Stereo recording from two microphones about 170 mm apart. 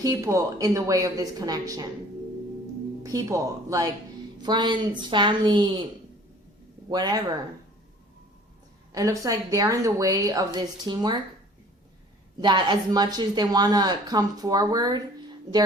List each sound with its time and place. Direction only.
0.0 s speech: 20° right (ahead or behind)
3.0 s speech: 20° right (ahead or behind)
6.9 s speech: 25° right (ahead or behind)
8.9 s speech: 20° right (ahead or behind)
12.4 s speech: 25° right (ahead or behind)